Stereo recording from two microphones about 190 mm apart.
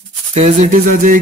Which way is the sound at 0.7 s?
45° right (ahead or behind).